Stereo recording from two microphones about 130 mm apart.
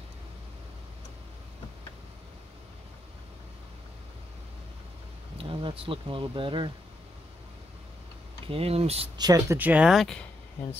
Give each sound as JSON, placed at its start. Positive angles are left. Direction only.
{"t": 5.4, "sound": "speech", "side_deg": -45}
{"t": 8.5, "sound": "speech", "side_deg": -50}
{"t": 9.2, "sound": "speech", "side_deg": -25}
{"t": 9.6, "sound": "speech", "side_deg": -10}